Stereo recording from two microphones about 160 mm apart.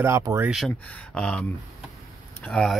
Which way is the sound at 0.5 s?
5° left (ahead or behind).